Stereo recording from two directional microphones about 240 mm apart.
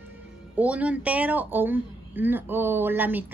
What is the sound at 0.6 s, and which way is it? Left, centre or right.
A woman's voice, centre.